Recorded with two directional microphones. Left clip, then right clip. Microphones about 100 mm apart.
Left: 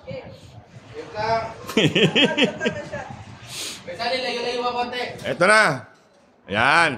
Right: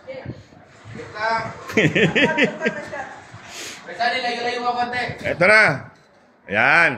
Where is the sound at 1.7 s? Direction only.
30° left (ahead or behind).